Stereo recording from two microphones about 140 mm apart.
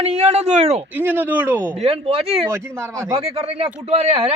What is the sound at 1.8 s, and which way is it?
Speech, 45° right (ahead or behind).